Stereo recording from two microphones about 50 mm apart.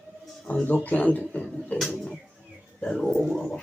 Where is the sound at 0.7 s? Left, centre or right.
Left.